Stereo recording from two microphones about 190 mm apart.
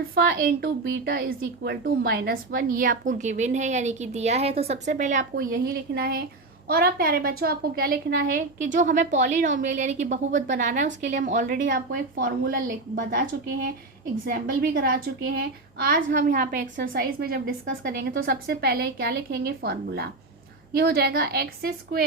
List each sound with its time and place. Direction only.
0.1 s a woman's voice: 50° right (ahead or behind)